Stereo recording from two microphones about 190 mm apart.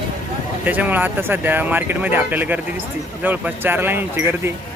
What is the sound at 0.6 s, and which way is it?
Speech, 10° right (ahead or behind).